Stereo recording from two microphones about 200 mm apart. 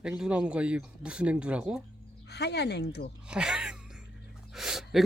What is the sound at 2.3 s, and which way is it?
Speech, 55° left (ahead or behind).